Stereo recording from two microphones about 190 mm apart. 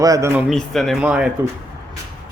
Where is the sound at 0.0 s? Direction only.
15° right (ahead or behind).